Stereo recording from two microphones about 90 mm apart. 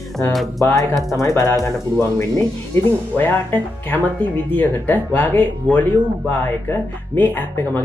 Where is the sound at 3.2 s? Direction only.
20° left (ahead or behind).